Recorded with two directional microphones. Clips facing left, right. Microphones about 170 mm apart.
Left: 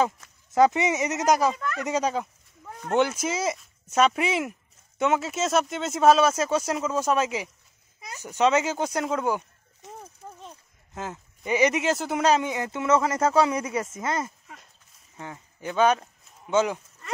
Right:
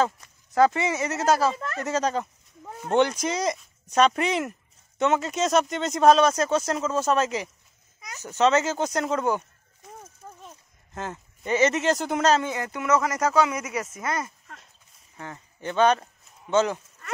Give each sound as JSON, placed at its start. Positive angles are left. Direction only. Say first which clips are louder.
{"t": 0.5, "sound": "speech", "louder": "left 1 dB", "side_deg": 20}
{"t": 10.5, "sound": "speech", "louder": "right 1 dB", "side_deg": 10}
{"t": 15.3, "sound": "speech", "louder": "right 1 dB", "side_deg": 5}